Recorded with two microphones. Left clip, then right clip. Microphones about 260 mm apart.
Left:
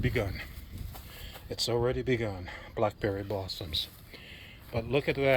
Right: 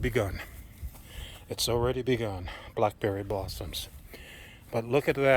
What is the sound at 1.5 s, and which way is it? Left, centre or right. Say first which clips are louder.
Speech: right 1 dB; centre.